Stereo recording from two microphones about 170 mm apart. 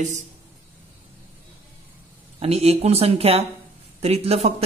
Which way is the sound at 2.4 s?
40° right (ahead or behind).